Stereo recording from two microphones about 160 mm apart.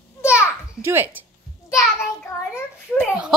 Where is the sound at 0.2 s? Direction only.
15° left (ahead or behind).